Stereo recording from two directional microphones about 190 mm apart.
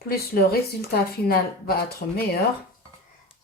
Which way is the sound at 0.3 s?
55° left (ahead or behind).